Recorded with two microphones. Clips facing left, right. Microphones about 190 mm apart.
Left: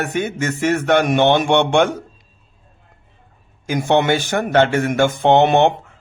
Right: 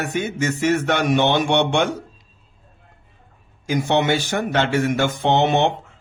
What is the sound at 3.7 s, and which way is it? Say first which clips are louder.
A man's voice: left 3 dB; 50° left (ahead or behind).